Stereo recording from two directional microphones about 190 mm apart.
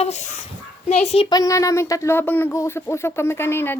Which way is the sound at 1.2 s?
20° left (ahead or behind).